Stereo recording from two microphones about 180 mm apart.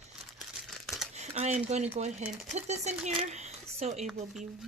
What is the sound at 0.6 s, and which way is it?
Crumpling, centre (ahead or behind).